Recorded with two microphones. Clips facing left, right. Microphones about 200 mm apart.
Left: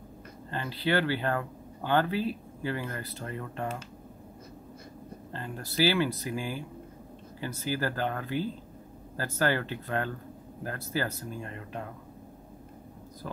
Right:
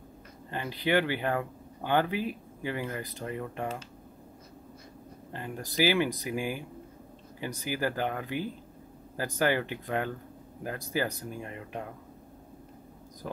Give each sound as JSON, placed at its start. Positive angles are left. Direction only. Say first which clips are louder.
{"t": 0.5, "sound": "speech", "louder": "right 1 dB", "side_deg": -15}
{"t": 5.3, "sound": "speech", "louder": "right 1 dB", "side_deg": -15}